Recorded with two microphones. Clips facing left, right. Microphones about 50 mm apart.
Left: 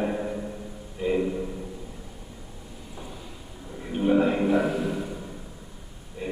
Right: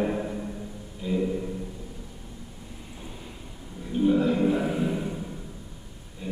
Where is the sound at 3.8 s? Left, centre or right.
Left.